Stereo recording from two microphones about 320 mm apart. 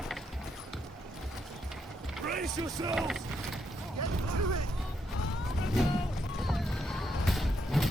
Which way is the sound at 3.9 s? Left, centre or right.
Right.